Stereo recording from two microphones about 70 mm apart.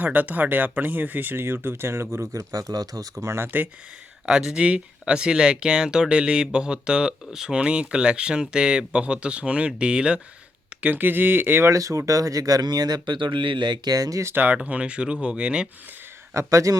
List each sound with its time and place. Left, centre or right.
0.0 s speech: right
2.4 s speech: right
3.2 s speech: right
4.3 s speech: centre; by 11.7 s right
11.7 s speech: right
14.3 s speech: right
14.5 s speech: centre
16.3 s speech: right